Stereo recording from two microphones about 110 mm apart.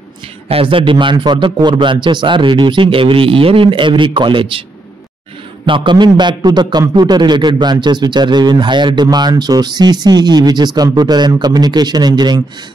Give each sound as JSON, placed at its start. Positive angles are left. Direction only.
{"t": 0.5, "sound": "a man's voice", "side_deg": -55}
{"t": 5.7, "sound": "a man's voice", "side_deg": -45}